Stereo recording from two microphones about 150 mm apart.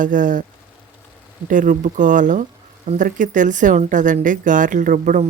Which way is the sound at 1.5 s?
60° right (ahead or behind).